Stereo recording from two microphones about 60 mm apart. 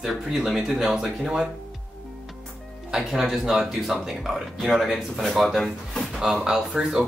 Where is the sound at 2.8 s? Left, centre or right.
Centre.